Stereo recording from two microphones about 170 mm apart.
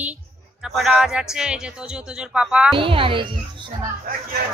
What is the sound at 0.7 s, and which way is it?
Speech, centre (ahead or behind).